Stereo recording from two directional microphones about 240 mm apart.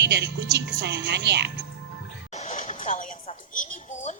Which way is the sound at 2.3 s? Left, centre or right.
Left.